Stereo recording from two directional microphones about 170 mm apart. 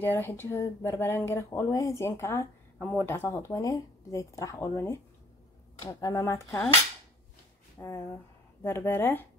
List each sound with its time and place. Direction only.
0.0 s speech: 10° left (ahead or behind)
7.8 s speech: 15° left (ahead or behind)